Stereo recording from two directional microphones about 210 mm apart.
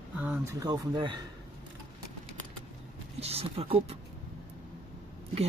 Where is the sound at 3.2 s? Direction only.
30° right (ahead or behind).